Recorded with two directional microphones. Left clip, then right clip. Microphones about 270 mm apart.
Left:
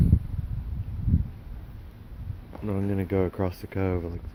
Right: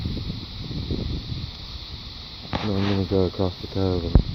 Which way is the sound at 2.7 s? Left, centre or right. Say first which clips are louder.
Right 3 dB; centre.